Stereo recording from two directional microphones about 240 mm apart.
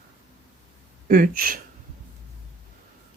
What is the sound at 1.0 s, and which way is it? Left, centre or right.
Speech, right.